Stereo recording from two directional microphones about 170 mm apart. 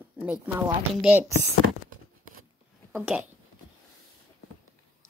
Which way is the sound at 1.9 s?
55° right (ahead or behind).